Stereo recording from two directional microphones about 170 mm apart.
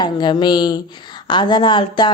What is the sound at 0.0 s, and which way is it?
A child's voice, 25° left (ahead or behind).